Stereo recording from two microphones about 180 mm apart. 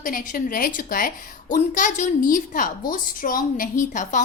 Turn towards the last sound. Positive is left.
turn(degrees=45)  # may be behind; listen again after turning